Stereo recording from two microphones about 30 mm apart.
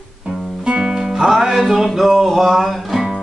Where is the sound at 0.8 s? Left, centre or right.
Right.